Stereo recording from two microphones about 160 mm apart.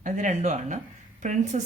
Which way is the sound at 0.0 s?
50° right (ahead or behind).